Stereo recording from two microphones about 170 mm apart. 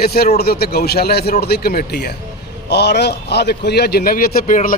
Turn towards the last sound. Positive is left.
turn(degrees=55)  # may be behind; listen again after turning